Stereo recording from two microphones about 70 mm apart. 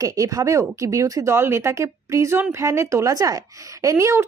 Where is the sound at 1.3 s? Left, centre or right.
Right.